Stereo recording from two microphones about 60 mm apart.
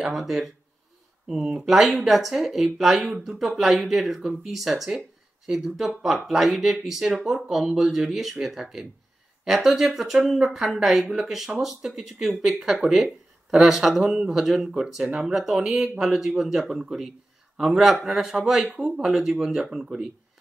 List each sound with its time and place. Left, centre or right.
0.0 s speech: centre
15.3 s speech: centre